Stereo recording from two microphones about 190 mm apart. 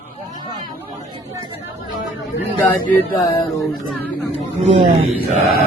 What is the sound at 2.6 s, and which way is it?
Music, 10° left (ahead or behind).